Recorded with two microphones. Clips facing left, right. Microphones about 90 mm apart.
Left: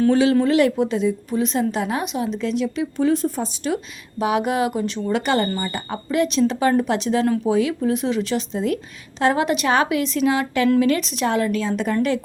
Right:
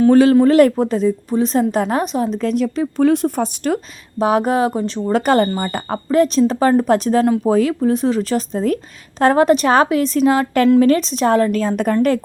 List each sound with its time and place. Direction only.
0.1 s a woman's voice: 45° right (ahead or behind)
4.2 s a woman's voice: 40° right (ahead or behind)